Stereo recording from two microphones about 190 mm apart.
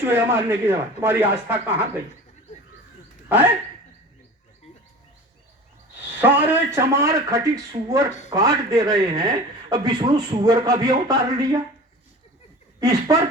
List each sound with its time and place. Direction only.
0.0 s a man's voice: 10° right (ahead or behind)
3.2 s speech: 10° right (ahead or behind)
6.1 s a man's voice: 10° right (ahead or behind)
12.8 s a man's voice: 15° right (ahead or behind)